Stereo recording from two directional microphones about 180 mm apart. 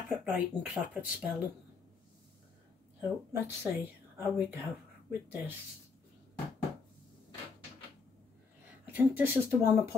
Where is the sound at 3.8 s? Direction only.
10° right (ahead or behind).